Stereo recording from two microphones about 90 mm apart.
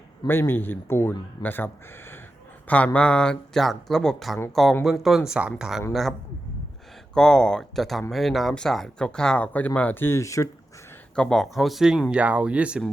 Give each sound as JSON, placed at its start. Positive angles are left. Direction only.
{"t": 0.3, "sound": "speech", "side_deg": 25}
{"t": 11.1, "sound": "speech", "side_deg": 10}